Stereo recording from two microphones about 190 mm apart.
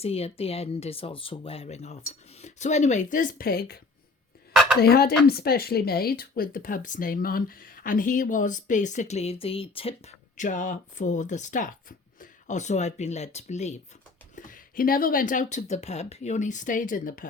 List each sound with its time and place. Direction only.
0.0 s speech: 30° left (ahead or behind); by 3.8 s 50° left (ahead or behind)
4.8 s a woman's voice: 55° left (ahead or behind); by 9.9 s 30° left (ahead or behind)
10.3 s speech: 40° left (ahead or behind)